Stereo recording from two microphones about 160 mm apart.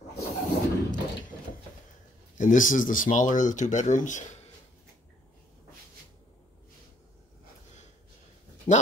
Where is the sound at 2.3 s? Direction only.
55° left (ahead or behind).